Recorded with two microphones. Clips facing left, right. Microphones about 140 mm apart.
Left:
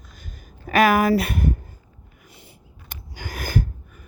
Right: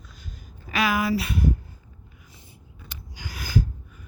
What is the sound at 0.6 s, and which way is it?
Speech, 50° left (ahead or behind).